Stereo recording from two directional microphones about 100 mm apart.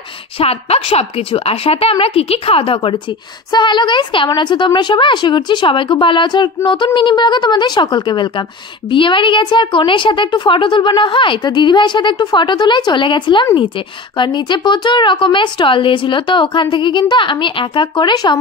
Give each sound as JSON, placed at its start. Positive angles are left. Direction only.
{"t": 0.4, "sound": "a woman's voice", "side_deg": 85}